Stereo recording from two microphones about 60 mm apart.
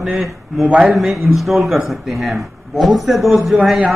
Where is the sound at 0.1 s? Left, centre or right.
Centre.